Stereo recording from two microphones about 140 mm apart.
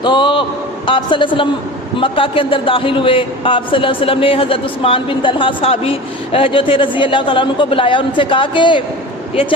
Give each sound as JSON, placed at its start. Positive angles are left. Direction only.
{"t": 0.0, "sound": "a man's voice", "side_deg": 35}